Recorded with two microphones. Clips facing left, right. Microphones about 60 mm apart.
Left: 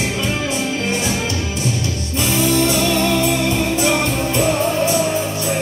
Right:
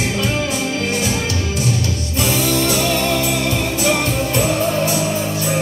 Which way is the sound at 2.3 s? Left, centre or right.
Centre.